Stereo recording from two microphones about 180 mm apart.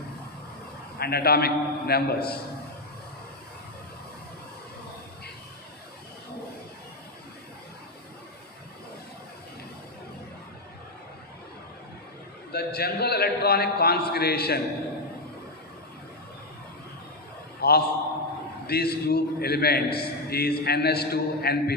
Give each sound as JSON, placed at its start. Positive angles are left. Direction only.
{"t": 0.9, "sound": "a man's voice", "side_deg": 60}
{"t": 12.5, "sound": "a man's voice", "side_deg": 60}
{"t": 17.6, "sound": "a sound", "side_deg": 60}
{"t": 18.7, "sound": "a man's voice", "side_deg": 60}